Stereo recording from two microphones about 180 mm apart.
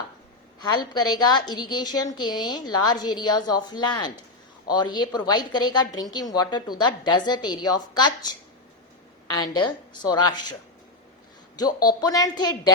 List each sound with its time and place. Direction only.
0.6 s a woman's voice: 25° left (ahead or behind)
11.5 s a woman's voice: 20° left (ahead or behind)